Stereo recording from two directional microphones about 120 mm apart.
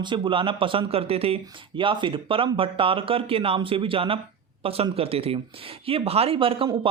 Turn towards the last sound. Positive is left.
turn(degrees=-45)  # may be behind; listen again after turning